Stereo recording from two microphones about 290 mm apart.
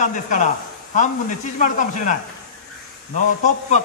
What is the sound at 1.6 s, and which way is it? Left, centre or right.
Speech, left.